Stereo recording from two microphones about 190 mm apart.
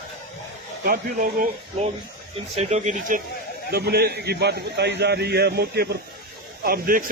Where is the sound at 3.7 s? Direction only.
55° right (ahead or behind).